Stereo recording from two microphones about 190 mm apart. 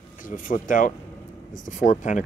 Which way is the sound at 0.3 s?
45° left (ahead or behind).